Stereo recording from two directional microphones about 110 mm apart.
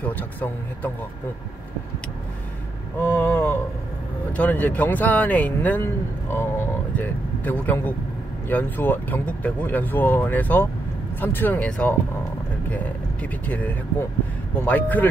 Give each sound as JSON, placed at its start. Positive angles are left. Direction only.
{"t": 0.0, "sound": "speech", "side_deg": 15}
{"t": 3.0, "sound": "vehicle", "side_deg": 15}
{"t": 4.3, "sound": "speech", "side_deg": 15}